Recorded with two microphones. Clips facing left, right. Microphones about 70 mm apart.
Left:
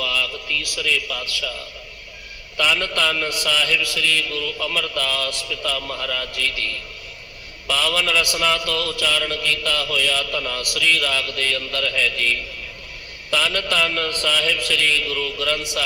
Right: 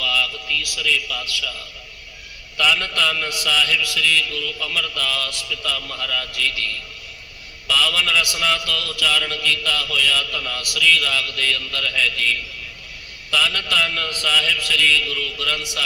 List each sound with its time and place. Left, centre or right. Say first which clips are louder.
0.0 s a man's voice: right 1 dB; left
2.6 s a man's voice: even; left
7.7 s a man's voice: even; left
13.3 s a man's voice: even; left